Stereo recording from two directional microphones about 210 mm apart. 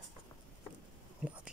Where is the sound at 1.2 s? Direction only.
5° right (ahead or behind).